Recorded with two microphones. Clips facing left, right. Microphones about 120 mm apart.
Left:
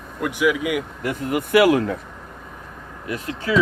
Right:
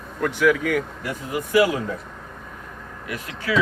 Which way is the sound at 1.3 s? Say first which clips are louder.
Left 4 dB; 65° left (ahead or behind).